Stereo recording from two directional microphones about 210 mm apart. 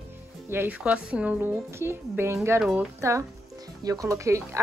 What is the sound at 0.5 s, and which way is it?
A woman's voice, 10° right (ahead or behind).